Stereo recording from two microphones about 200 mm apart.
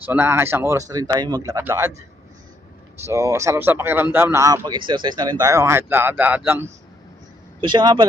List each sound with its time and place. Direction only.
0.0 s speech: 10° right (ahead or behind)
3.1 s speech: 15° right (ahead or behind)
7.6 s speech: 20° right (ahead or behind)